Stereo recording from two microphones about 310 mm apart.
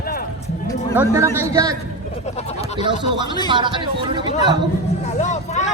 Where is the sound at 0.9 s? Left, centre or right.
Centre.